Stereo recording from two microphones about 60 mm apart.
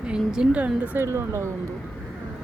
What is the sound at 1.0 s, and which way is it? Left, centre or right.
Speech, right.